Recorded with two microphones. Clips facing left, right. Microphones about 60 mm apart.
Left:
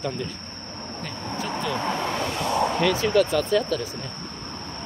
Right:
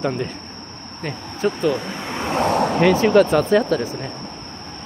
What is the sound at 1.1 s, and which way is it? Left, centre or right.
Speech, centre.